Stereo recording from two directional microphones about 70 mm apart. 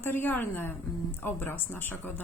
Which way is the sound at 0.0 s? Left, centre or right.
Left.